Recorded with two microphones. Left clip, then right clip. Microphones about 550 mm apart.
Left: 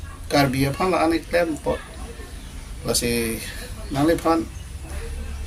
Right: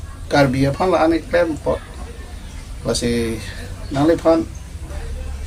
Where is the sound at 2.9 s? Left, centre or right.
Left.